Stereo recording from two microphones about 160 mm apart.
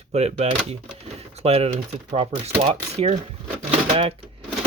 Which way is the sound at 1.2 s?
40° right (ahead or behind).